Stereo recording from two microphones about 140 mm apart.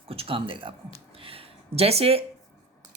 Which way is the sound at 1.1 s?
40° right (ahead or behind).